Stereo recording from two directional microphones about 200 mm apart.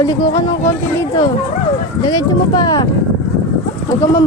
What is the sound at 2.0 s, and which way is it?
Speech, 20° left (ahead or behind).